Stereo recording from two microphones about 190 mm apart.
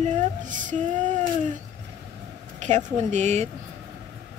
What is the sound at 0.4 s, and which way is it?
Female singing, 45° right (ahead or behind).